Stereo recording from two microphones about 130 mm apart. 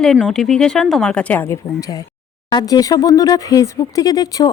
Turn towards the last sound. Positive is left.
turn(degrees=30)  # may be behind; listen again after turning